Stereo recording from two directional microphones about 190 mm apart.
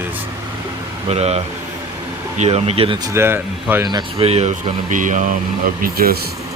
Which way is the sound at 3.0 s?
15° right (ahead or behind).